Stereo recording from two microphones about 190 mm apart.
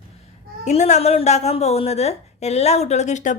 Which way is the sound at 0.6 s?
35° left (ahead or behind).